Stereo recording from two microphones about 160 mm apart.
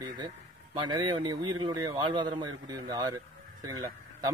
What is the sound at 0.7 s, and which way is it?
A man's voice, 30° right (ahead or behind).